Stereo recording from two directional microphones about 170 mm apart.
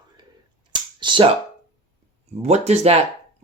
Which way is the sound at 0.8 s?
30° right (ahead or behind).